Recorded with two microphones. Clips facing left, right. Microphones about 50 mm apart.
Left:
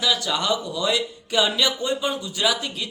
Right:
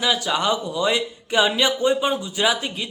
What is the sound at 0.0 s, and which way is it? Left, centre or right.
Speech, right.